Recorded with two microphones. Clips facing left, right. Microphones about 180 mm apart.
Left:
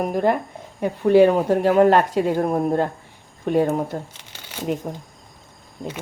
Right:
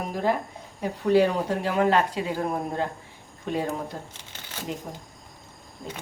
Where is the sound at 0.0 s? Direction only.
55° left (ahead or behind).